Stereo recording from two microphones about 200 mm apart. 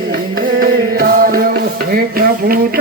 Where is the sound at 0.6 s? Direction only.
45° right (ahead or behind).